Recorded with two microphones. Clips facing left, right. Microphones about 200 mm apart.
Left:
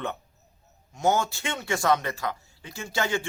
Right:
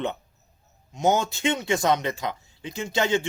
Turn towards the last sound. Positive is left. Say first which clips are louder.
# right 4 dB
turn(degrees=-20)  # may be behind; listen again after turning